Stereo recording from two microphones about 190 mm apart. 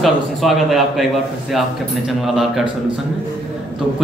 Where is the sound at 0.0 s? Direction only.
Centre (ahead or behind).